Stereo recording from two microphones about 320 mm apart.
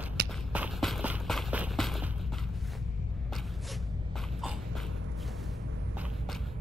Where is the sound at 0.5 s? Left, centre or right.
Centre.